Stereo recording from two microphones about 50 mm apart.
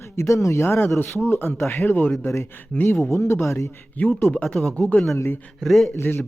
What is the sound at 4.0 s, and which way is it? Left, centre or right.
Speech, left.